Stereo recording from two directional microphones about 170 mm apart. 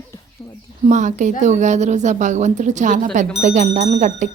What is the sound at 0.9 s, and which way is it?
A woman's voice, 45° right (ahead or behind).